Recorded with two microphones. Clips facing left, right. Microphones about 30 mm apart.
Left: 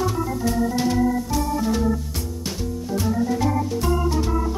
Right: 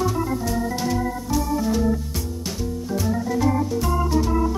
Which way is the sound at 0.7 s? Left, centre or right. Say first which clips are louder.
Left 4 dB; centre.